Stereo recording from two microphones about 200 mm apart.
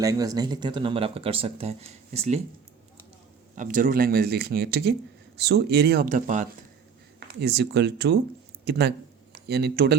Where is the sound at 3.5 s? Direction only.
40° right (ahead or behind).